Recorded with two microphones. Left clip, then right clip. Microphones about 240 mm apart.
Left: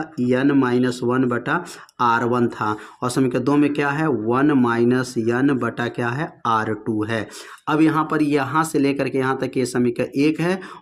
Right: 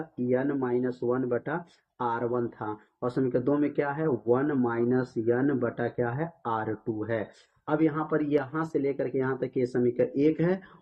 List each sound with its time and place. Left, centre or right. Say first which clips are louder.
0.3 s speech: left 9 dB; left